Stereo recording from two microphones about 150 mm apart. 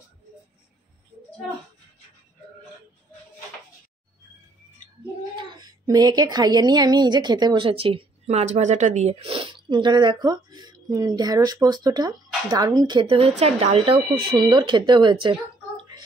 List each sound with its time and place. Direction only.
5.6 s a woman's voice: 25° right (ahead or behind)